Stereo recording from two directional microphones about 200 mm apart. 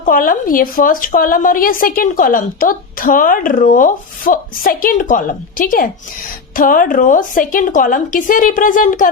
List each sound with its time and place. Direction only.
0.0 s a woman's voice: 45° left (ahead or behind)